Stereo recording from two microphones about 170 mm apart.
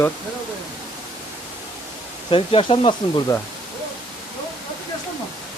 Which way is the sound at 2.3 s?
30° left (ahead or behind).